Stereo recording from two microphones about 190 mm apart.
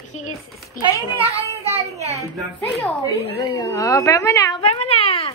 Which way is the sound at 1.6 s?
35° right (ahead or behind).